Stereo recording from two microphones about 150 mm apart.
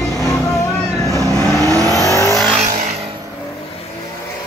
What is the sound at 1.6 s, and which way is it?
Vehicle, 20° right (ahead or behind).